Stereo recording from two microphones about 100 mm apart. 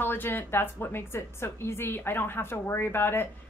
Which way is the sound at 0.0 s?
20° left (ahead or behind).